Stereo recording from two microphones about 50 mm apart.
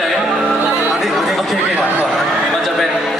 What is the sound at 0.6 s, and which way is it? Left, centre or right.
Music, right.